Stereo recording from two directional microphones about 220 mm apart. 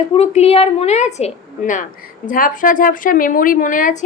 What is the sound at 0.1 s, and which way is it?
A woman's voice, 25° left (ahead or behind).